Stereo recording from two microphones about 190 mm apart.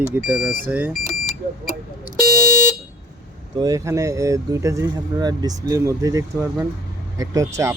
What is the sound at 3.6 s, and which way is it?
Speech, 20° right (ahead or behind).